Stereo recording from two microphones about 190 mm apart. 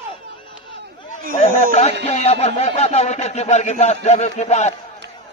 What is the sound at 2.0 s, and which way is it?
Speech, 35° left (ahead or behind).